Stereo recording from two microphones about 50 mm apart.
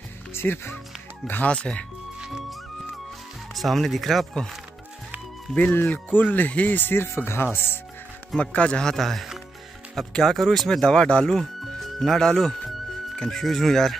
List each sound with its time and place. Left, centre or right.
0.3 s speech: left
1.4 s speech: left
3.5 s speech: centre
5.6 s speech: left
6.1 s speech: left
8.4 s a man's voice: left; by 10.8 s centre
10.8 s a man's voice: centre
11.2 s speech: centre